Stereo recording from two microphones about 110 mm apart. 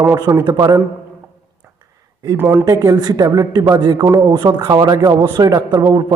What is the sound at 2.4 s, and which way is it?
Speech, 20° right (ahead or behind).